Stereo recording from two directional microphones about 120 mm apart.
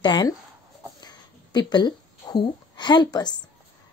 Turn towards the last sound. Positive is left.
turn(degrees=35)  # may be behind; listen again after turning